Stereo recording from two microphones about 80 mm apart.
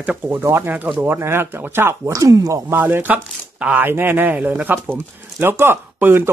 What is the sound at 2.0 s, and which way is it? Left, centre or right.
Speech, right.